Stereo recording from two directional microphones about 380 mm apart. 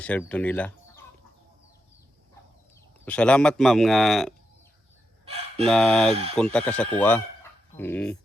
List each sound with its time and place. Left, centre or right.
0.0 s speech: centre
3.0 s a man's voice: centre
5.2 s chicken: centre
5.6 s a man's voice: centre